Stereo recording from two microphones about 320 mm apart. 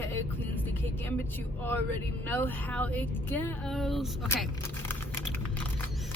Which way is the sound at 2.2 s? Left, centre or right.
Centre.